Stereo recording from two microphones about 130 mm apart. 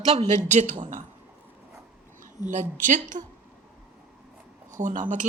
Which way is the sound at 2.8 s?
80° right.